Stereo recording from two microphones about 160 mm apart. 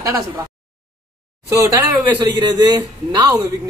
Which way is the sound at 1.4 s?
20° right (ahead or behind).